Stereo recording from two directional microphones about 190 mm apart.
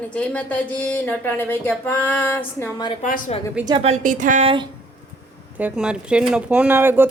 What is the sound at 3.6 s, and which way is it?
Speech, 25° right (ahead or behind).